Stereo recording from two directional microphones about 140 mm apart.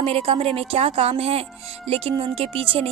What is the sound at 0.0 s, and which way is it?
A woman's voice, 45° right (ahead or behind).